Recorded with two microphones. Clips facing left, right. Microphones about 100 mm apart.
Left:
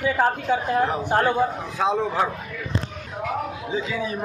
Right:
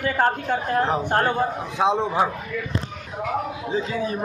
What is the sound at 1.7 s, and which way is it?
Speech, 20° right (ahead or behind).